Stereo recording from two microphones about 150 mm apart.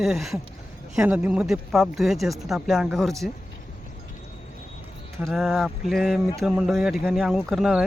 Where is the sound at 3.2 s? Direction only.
70° left (ahead or behind).